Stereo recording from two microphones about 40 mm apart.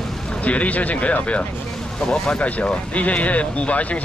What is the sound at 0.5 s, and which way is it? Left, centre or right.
Speech, left.